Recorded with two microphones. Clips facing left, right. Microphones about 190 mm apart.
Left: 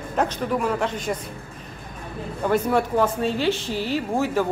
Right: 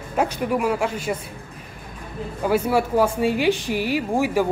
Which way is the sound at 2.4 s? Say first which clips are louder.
Right 1 dB; 10° right (ahead or behind).